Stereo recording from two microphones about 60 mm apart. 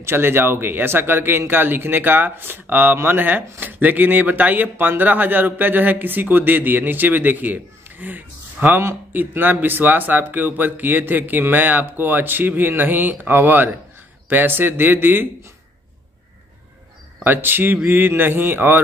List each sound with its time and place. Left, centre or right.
0.0 s speech: right
17.2 s speech: right